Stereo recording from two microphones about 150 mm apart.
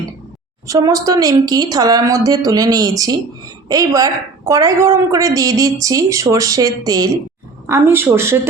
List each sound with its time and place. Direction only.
0.7 s a woman's voice: 20° right (ahead or behind)